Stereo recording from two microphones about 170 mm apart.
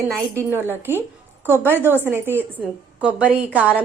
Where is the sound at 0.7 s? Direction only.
15° right (ahead or behind).